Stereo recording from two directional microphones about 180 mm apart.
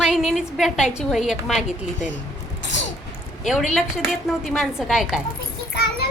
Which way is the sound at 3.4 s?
Centre (ahead or behind).